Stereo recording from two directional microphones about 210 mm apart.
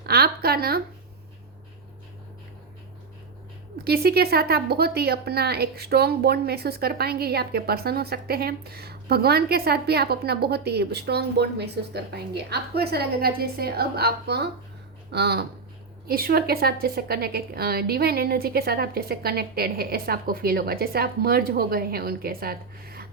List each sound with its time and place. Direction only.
0.0 s speech: 45° right (ahead or behind)
3.8 s a woman's voice: 50° right (ahead or behind)